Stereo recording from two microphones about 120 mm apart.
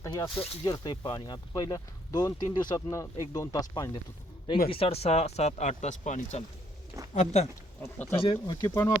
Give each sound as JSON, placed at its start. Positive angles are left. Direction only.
{"t": 0.6, "sound": "speech", "side_deg": 35}
{"t": 4.4, "sound": "speech", "side_deg": 45}
{"t": 7.1, "sound": "speech", "side_deg": 80}
{"t": 8.1, "sound": "speech", "side_deg": 45}
{"t": 8.6, "sound": "speech", "side_deg": 25}